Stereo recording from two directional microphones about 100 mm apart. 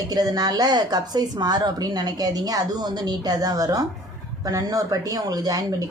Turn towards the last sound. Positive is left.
turn(degrees=-40)  # may be behind; listen again after turning